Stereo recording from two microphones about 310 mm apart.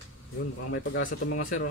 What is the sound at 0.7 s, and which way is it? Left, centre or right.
Speech, left.